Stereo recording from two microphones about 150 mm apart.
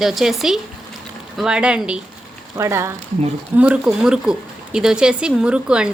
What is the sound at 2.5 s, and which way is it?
A woman's voice, 20° right (ahead or behind).